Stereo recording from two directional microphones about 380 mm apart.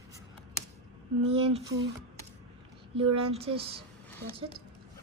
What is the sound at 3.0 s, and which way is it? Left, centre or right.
Speech, centre.